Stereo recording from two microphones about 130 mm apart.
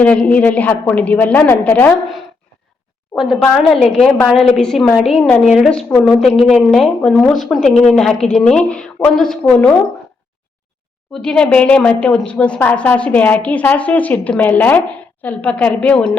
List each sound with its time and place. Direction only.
0.0 s speech: 10° left (ahead or behind)
3.7 s a woman's voice: centre (ahead or behind)
11.1 s speech: 5° left (ahead or behind)